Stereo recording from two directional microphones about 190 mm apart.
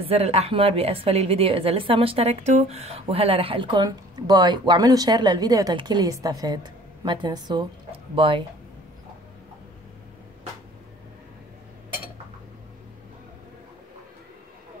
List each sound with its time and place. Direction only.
0.0 s a woman's voice: 35° right (ahead or behind)